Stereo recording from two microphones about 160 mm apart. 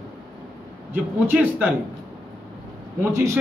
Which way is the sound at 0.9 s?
10° right (ahead or behind).